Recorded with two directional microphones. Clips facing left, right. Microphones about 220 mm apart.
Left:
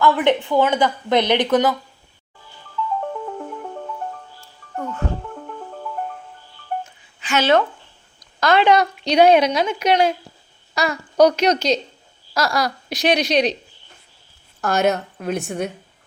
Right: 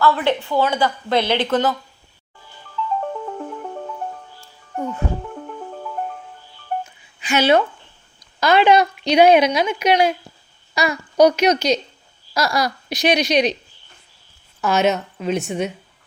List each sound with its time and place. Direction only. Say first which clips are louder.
0.0 s speech: left 2 dB; 15° left (ahead or behind)
3.1 s music: right 1 dB; 5° right (ahead or behind)
6.8 s a sound: right 4 dB; 15° right (ahead or behind)
8.4 s speech: right 1 dB; 5° right (ahead or behind)
14.6 s speech: right 1 dB; 5° right (ahead or behind)